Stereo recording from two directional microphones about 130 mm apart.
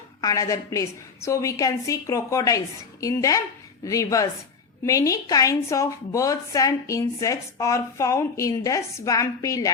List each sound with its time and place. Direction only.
0.2 s a woman's voice: 25° left (ahead or behind)